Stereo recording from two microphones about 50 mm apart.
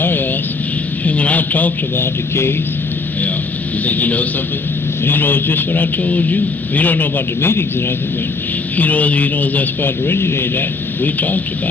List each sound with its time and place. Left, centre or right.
0.0 s vehicle: left
1.0 s a sound: left
2.0 s speech: left
3.8 s a man's voice: left
5.0 s a man's voice: left
7.4 s speech: left
8.7 s a man's voice: left
10.1 s speech: left